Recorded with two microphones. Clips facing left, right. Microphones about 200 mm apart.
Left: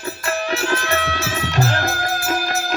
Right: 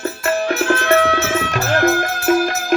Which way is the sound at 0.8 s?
55° right (ahead or behind).